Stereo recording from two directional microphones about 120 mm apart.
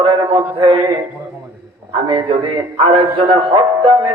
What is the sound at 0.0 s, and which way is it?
Mantra, 50° right (ahead or behind).